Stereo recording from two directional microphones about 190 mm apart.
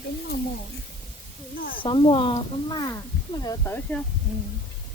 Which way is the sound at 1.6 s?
50° left (ahead or behind).